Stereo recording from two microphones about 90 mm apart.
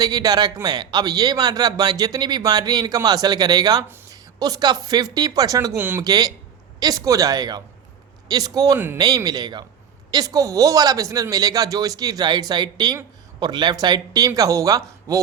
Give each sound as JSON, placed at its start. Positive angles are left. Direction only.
{"t": 0.0, "sound": "speech", "side_deg": -45}
{"t": 5.7, "sound": "speech", "side_deg": -20}
{"t": 6.0, "sound": "speech", "side_deg": -45}